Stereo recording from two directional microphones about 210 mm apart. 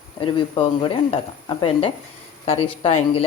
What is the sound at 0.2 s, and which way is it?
Speech, 25° left (ahead or behind).